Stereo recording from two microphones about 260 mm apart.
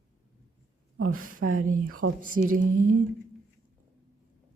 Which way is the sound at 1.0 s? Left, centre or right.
Right.